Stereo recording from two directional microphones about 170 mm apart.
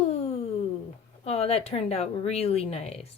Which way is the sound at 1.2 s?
35° left (ahead or behind).